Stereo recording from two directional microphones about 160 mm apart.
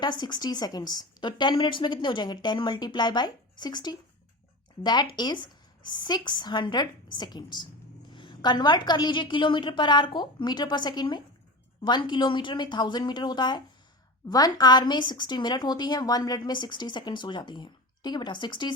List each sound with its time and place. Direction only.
0.0 s a woman's voice: 25° left (ahead or behind)